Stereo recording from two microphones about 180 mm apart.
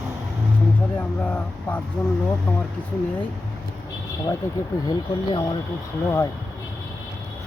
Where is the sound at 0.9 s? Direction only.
10° left (ahead or behind).